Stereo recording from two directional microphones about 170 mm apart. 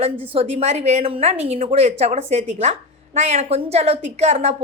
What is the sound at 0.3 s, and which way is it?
A woman's voice, 40° right (ahead or behind).